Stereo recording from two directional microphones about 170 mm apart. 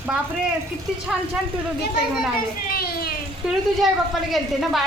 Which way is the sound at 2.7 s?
60° left (ahead or behind).